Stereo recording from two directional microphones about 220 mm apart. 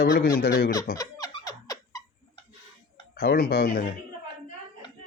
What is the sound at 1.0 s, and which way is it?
Laughter, 15° left (ahead or behind).